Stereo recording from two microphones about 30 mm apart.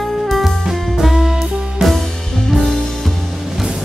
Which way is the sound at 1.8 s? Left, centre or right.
Centre.